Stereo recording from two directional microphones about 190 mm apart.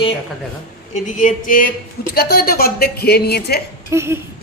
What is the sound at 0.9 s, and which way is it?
A woman's voice, 40° left (ahead or behind).